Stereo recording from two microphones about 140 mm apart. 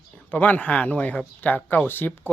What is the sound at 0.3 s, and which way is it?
Speech, 10° left (ahead or behind).